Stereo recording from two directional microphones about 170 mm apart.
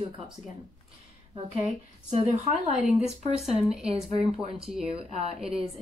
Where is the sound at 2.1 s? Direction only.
40° right (ahead or behind).